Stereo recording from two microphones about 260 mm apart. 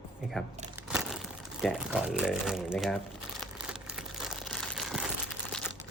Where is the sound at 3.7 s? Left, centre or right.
Centre.